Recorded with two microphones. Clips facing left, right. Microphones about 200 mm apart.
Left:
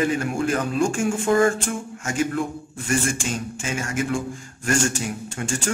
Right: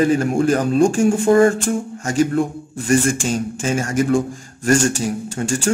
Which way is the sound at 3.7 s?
40° right (ahead or behind).